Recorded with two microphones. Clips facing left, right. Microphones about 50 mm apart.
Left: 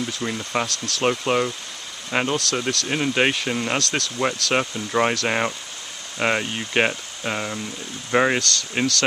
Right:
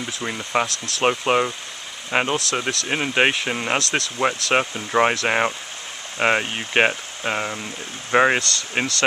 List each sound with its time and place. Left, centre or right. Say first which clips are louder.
0.0 s speech: left 1 dB; centre
0.7 s speech: right 1 dB; right